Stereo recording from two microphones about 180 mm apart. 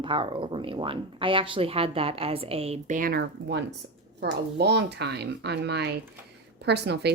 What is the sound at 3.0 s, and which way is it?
A woman's voice, 55° right (ahead or behind).